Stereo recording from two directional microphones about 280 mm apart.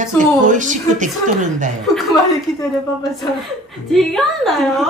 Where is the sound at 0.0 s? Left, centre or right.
Right.